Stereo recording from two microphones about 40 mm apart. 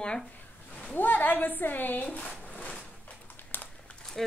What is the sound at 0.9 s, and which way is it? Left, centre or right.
A woman's voice, left.